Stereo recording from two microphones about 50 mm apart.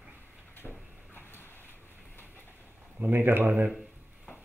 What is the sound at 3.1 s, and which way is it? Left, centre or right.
Speech, right.